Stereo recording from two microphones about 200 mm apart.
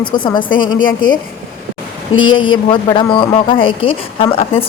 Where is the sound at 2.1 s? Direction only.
85° left.